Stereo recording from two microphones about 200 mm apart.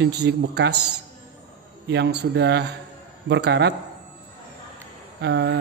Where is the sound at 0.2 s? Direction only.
60° right (ahead or behind).